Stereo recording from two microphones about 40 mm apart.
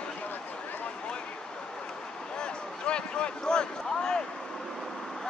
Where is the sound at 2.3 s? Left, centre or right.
Left.